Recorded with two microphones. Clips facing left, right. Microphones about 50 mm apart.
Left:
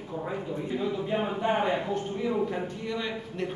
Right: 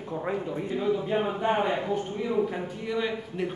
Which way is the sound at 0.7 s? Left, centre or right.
Centre.